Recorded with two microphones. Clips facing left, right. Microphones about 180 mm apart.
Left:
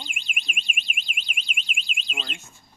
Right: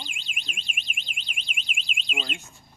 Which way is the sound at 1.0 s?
5° left (ahead or behind).